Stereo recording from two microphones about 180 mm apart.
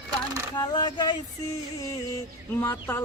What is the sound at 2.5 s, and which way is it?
Speech, 15° left (ahead or behind).